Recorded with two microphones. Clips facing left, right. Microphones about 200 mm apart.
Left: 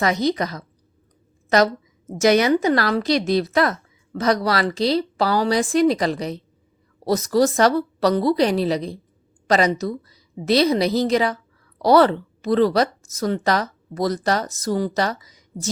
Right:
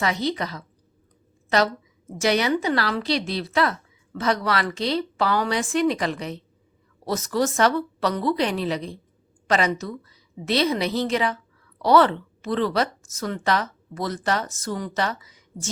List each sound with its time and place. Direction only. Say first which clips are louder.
0.0 s a woman's voice: left 5 dB; 40° left (ahead or behind)